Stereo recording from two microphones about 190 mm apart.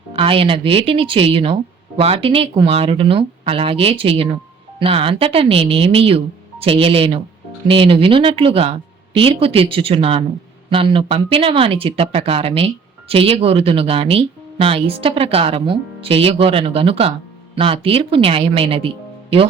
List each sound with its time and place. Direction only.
0.1 s speech: 30° right (ahead or behind)